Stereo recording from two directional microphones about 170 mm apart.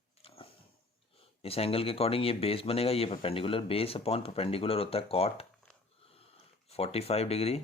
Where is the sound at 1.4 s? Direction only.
35° left (ahead or behind).